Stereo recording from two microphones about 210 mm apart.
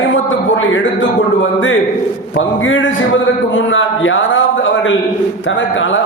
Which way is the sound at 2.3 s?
70° left (ahead or behind).